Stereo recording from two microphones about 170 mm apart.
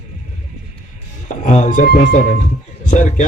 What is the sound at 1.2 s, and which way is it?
Speech, 45° left (ahead or behind).